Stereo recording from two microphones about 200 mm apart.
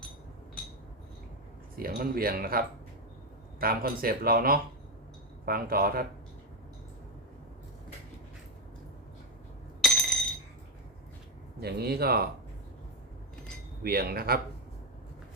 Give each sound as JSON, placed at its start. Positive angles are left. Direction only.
{"t": 1.8, "sound": "speech", "side_deg": -45}
{"t": 9.8, "sound": "a sound", "side_deg": 0}
{"t": 11.6, "sound": "speech", "side_deg": -50}
{"t": 13.8, "sound": "speech", "side_deg": -50}